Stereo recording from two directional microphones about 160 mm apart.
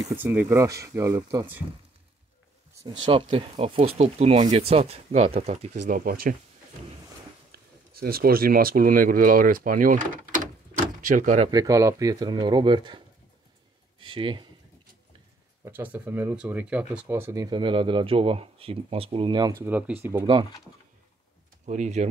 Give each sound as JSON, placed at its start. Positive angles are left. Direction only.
{"t": 0.0, "sound": "speech", "side_deg": -15}
{"t": 2.8, "sound": "speech", "side_deg": -30}
{"t": 5.9, "sound": "speech", "side_deg": -60}
{"t": 7.5, "sound": "speech", "side_deg": -70}
{"t": 11.5, "sound": "speech", "side_deg": -20}
{"t": 15.6, "sound": "speech", "side_deg": -10}
{"t": 20.2, "sound": "speech", "side_deg": -30}
{"t": 21.6, "sound": "speech", "side_deg": -50}